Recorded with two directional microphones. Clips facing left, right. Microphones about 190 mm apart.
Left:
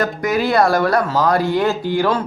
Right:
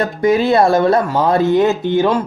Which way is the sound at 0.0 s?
30° right (ahead or behind).